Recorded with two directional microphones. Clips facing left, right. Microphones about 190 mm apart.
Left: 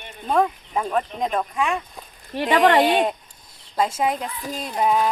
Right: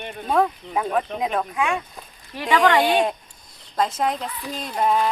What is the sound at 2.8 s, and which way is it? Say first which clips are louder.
Speech: left 1 dB; centre (ahead or behind).